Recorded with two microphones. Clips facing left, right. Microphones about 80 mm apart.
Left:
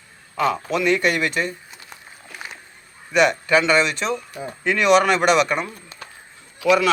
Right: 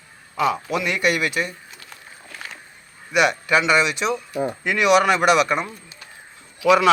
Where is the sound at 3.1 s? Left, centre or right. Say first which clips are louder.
Left 1 dB; centre.